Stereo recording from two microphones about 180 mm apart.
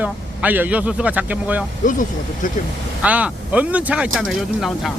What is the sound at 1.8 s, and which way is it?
Speech, 45° left (ahead or behind).